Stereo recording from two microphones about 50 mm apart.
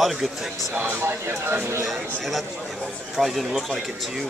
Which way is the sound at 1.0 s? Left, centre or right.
Right.